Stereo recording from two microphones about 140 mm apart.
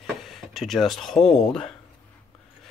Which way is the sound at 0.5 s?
Centre (ahead or behind).